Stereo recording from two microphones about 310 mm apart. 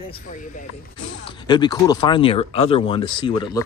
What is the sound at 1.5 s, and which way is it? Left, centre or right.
Speech, centre.